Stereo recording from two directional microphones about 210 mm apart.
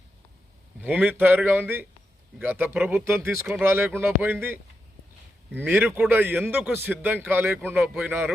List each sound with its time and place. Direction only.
0.8 s a man's voice: 5° right (ahead or behind)
5.6 s a man's voice: 10° right (ahead or behind)